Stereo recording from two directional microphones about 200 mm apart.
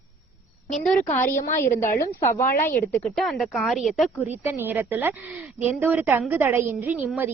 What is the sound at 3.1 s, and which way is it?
Speech, centre (ahead or behind).